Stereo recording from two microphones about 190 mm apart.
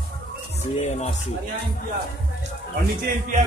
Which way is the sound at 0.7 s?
35° left (ahead or behind).